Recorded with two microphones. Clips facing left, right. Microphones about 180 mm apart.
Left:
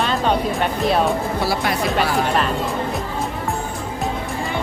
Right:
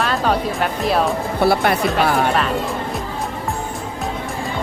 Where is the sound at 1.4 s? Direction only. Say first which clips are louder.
Right 9 dB; 60° right (ahead or behind).